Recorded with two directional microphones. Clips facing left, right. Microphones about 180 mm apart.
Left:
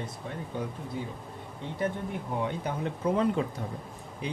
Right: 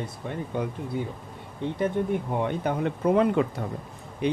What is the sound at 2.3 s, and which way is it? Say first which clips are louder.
Speech: right 5 dB; 60° right (ahead or behind).